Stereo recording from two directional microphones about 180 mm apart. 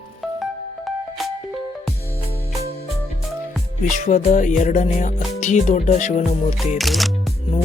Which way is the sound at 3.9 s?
45° left (ahead or behind).